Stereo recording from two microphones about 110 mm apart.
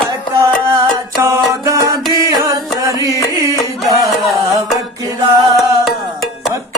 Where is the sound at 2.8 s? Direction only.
30° right (ahead or behind).